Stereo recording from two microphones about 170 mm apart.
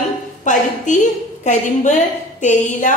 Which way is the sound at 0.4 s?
45° left (ahead or behind).